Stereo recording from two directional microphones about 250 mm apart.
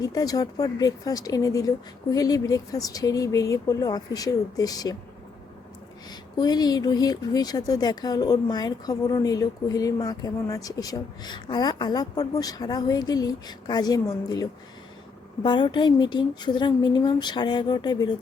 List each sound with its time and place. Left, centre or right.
0.0 s speech: centre
6.1 s speech: centre
15.4 s speech: centre